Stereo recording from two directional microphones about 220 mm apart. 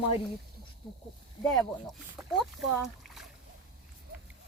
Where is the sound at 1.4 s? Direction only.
Centre (ahead or behind).